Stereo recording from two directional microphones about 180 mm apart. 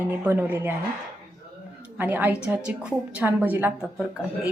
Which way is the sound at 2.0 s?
10° right (ahead or behind).